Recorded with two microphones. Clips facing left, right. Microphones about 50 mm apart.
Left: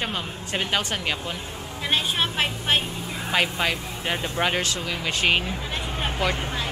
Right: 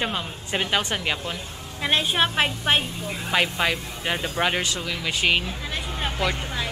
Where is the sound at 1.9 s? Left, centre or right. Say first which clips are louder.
Right 3 dB; centre.